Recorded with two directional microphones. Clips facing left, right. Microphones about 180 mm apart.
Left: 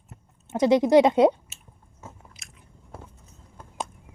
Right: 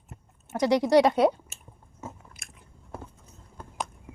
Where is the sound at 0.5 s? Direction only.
20° left (ahead or behind).